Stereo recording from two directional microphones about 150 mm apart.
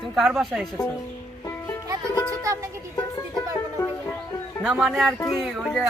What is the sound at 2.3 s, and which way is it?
Music, 20° right (ahead or behind).